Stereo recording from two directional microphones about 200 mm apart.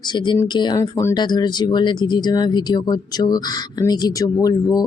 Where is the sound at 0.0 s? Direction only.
20° left (ahead or behind).